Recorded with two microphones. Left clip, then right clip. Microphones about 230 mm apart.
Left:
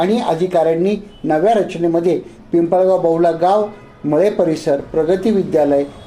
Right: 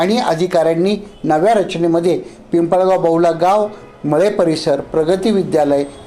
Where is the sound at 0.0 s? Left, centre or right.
Right.